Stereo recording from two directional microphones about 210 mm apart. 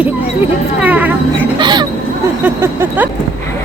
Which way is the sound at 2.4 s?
10° right (ahead or behind).